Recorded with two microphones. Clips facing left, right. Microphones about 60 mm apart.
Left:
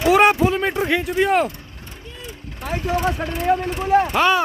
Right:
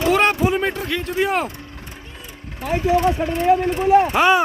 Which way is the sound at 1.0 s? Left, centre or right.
Centre.